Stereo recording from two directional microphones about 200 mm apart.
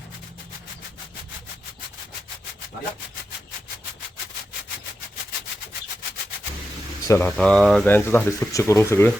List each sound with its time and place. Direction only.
7.0 s speech: 15° left (ahead or behind)
7.3 s speech: 5° left (ahead or behind)